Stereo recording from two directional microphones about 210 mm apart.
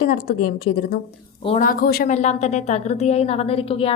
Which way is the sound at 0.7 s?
90° left.